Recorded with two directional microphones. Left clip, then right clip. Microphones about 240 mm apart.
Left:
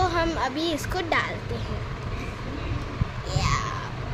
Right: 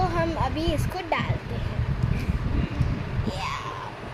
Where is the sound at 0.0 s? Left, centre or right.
Left.